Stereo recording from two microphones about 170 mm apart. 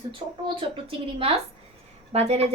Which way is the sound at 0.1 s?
30° right (ahead or behind).